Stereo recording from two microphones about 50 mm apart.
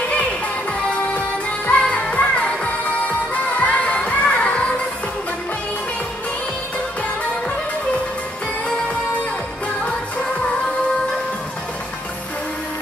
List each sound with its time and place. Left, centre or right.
0.1 s music: left